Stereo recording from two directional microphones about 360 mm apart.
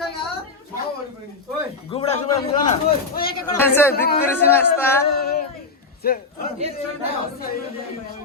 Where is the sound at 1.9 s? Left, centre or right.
Centre.